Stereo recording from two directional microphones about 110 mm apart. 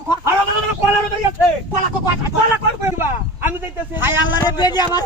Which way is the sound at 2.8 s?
20° right (ahead or behind).